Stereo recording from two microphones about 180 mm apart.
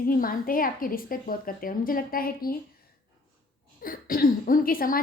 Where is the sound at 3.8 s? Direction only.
55° left (ahead or behind).